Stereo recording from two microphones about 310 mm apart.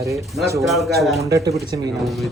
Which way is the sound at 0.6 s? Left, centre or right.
Centre.